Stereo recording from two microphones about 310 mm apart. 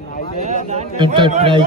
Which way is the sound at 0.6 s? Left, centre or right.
Centre.